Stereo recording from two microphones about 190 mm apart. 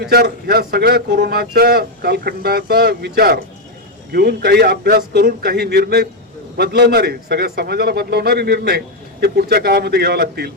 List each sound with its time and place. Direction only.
0.0 s speech: 55° right (ahead or behind)